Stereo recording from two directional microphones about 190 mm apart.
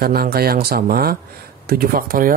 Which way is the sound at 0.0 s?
55° right (ahead or behind).